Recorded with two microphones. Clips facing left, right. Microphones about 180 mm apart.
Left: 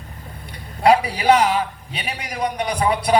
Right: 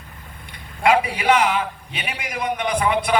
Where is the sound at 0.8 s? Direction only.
35° left (ahead or behind).